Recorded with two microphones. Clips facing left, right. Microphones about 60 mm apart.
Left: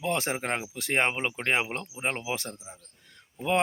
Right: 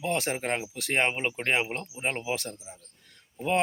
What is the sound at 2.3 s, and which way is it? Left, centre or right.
Speech, left.